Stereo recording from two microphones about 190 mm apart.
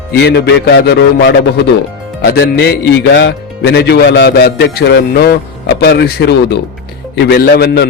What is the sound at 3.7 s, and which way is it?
A man's voice, 60° left (ahead or behind).